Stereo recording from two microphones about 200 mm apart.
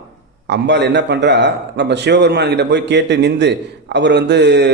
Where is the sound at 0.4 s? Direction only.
60° right (ahead or behind).